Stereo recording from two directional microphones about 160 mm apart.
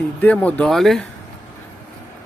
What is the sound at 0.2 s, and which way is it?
Speech, 10° left (ahead or behind).